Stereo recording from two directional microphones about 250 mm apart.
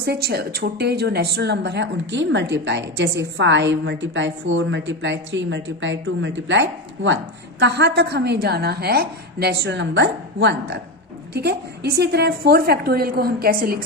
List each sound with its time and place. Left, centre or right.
0.0 s a woman's voice: right